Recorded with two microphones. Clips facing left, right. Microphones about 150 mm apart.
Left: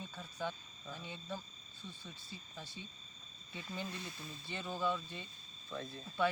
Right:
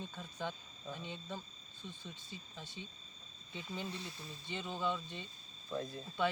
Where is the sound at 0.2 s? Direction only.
15° right (ahead or behind).